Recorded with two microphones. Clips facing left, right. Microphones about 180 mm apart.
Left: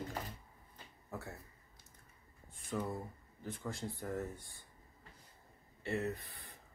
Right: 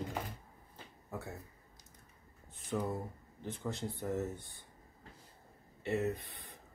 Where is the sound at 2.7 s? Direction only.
20° right (ahead or behind).